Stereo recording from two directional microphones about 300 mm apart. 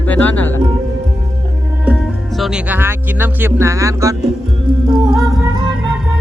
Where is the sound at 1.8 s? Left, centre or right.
Centre.